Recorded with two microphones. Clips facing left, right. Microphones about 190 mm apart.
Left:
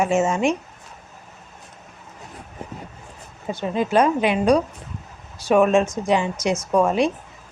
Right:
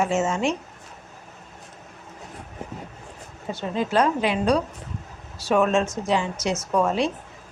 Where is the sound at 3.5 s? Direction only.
15° left (ahead or behind).